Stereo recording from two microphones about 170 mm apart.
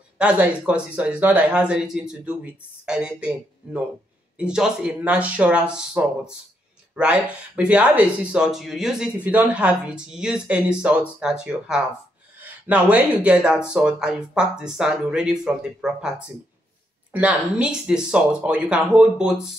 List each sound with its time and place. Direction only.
0.2 s speech: 5° right (ahead or behind)